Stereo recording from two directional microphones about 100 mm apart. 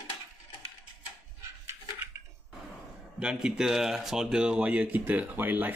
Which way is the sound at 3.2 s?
10° right (ahead or behind).